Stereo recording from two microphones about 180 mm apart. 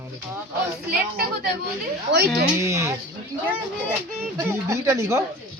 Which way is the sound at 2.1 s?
65° right (ahead or behind).